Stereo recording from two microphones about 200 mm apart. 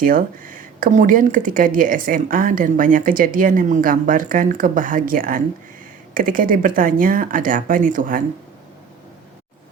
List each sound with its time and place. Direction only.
0.0 s speech: 45° right (ahead or behind)